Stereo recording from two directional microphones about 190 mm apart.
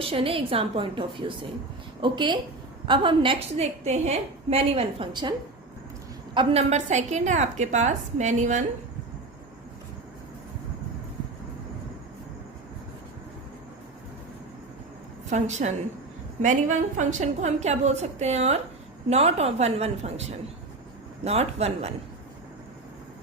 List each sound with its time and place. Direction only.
0.0 s a woman's voice: 30° right (ahead or behind)
6.3 s a woman's voice: 30° right (ahead or behind)
15.3 s a woman's voice: 35° right (ahead or behind)